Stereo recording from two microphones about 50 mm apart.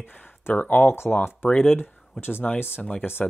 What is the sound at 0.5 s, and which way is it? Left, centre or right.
Speech, left.